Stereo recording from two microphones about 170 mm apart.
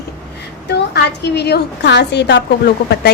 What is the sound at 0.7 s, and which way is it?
A woman's voice, 80° left.